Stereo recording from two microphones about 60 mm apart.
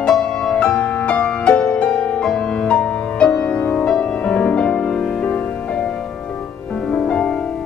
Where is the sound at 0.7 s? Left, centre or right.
Left.